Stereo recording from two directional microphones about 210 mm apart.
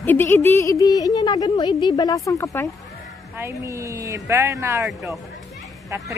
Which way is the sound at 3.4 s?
15° right (ahead or behind).